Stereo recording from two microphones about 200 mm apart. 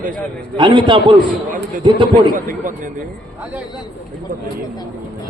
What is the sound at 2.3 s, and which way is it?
Speech, 40° right (ahead or behind).